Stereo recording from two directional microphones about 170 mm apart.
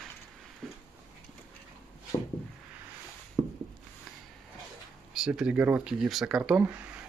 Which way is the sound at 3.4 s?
25° right (ahead or behind).